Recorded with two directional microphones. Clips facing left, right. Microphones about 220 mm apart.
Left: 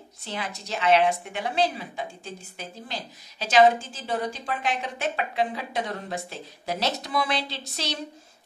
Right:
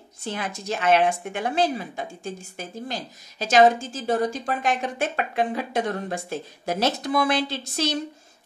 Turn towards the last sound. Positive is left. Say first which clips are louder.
# right 7 dB
turn(degrees=-50)  # may be behind; listen again after turning